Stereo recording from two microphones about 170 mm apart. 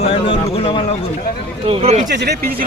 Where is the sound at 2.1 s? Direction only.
75° right (ahead or behind).